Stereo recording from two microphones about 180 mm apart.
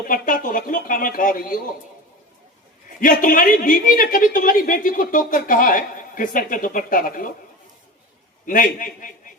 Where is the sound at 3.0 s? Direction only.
50° left (ahead or behind).